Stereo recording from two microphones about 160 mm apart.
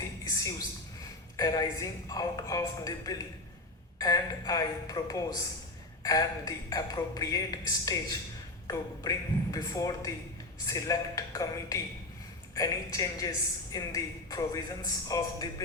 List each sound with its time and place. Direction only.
1.4 s speech: 20° left (ahead or behind)